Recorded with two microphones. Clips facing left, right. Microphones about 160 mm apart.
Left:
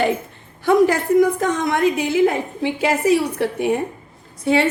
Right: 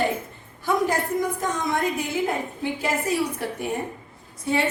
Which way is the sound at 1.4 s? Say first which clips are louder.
Left 6 dB; 80° left.